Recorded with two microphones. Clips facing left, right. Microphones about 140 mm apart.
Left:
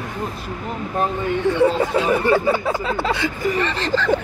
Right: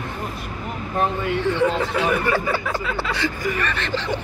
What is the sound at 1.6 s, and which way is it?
Speech, 30° left (ahead or behind).